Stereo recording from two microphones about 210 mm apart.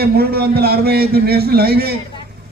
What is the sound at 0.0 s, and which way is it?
A man's voice, 50° right (ahead or behind).